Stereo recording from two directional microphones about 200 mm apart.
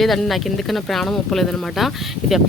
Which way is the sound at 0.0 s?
Centre (ahead or behind).